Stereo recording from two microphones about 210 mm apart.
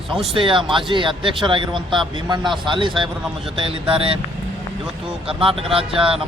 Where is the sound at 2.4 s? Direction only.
Centre (ahead or behind).